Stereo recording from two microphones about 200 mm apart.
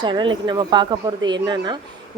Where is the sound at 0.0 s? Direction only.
25° right (ahead or behind).